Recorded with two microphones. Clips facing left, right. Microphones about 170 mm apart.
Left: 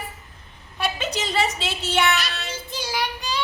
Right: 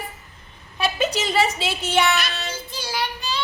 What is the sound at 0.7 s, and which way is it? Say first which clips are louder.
A woman's voice: right 4 dB; 10° right (ahead or behind).